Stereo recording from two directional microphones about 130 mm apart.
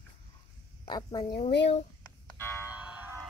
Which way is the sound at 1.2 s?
50° left (ahead or behind).